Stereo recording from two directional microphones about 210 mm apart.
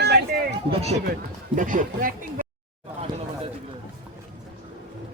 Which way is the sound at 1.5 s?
40° right (ahead or behind).